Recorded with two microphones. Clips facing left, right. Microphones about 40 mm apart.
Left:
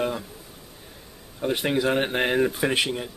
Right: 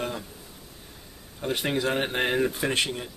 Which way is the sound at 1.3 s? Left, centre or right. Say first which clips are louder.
Left 3 dB; centre.